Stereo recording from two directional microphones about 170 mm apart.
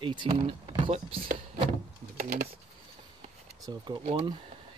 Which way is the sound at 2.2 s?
50° right (ahead or behind).